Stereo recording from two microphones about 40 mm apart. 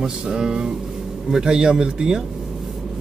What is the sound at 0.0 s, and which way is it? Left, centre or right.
Speech, centre.